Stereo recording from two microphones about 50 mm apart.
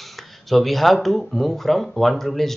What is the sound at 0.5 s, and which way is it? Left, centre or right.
Speech, centre.